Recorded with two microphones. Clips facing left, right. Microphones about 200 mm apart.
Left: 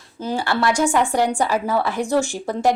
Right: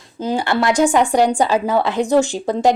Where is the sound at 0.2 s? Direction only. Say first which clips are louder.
Right 3 dB; 15° right (ahead or behind).